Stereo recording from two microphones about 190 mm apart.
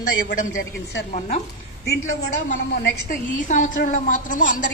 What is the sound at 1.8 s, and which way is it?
A woman's voice, 60° left (ahead or behind).